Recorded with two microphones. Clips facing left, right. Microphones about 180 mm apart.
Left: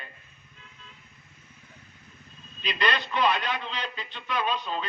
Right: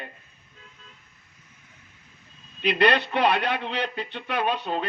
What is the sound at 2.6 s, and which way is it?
Speech, 65° right (ahead or behind).